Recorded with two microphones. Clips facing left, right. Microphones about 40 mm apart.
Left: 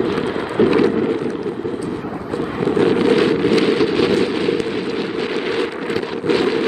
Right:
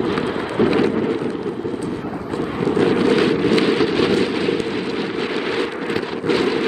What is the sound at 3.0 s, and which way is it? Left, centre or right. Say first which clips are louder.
Wind noise: left 1 dB; left.